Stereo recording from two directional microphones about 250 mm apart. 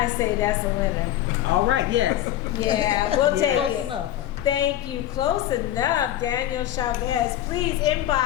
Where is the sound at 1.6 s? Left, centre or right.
Right.